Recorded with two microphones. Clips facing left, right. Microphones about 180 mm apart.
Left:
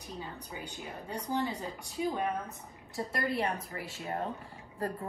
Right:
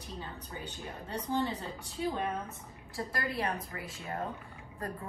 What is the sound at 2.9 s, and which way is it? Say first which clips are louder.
A woman's voice: left 3 dB; 25° left (ahead or behind).